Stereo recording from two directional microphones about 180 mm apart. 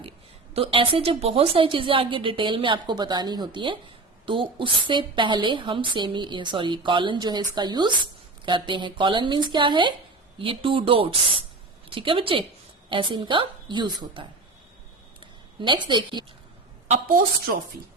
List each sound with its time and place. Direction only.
0.5 s a woman's voice: 30° right (ahead or behind)
15.2 s a sound: 25° right (ahead or behind)
16.9 s a woman's voice: 50° right (ahead or behind)